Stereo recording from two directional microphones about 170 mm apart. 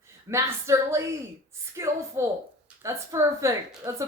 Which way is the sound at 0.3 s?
15° right (ahead or behind).